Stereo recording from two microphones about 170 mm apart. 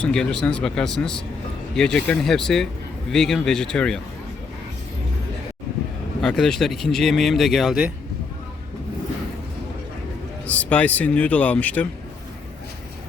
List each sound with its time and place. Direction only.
0.0 s speech: 5° left (ahead or behind)
6.2 s speech: 5° left (ahead or behind)
10.4 s speech: 10° left (ahead or behind)